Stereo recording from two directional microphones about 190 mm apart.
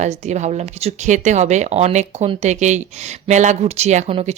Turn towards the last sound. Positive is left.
turn(degrees=-35)  # may be behind; listen again after turning